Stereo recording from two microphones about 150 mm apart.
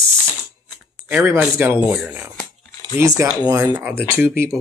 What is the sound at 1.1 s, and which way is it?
Speech, 15° right (ahead or behind).